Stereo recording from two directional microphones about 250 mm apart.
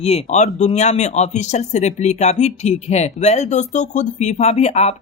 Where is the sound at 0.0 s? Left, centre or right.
Left.